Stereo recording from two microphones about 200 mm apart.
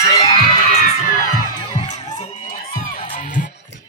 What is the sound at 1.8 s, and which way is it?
Music, 35° left (ahead or behind).